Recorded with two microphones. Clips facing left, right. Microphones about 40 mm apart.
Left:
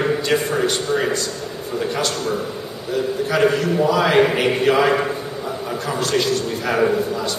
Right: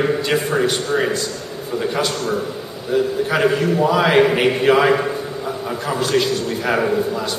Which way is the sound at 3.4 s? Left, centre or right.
Centre.